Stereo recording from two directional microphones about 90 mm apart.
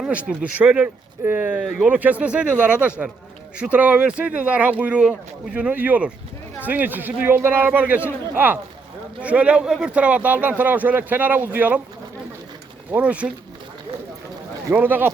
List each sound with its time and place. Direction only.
0.0 s speech: 15° right (ahead or behind)
9.2 s speech: 15° right (ahead or behind)
12.9 s speech: 15° right (ahead or behind)
14.7 s speech: 20° right (ahead or behind)